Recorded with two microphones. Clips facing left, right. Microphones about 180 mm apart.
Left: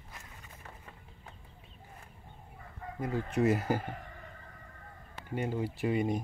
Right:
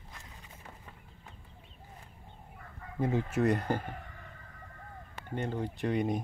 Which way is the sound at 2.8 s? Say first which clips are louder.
Left 5 dB; 25° left (ahead or behind).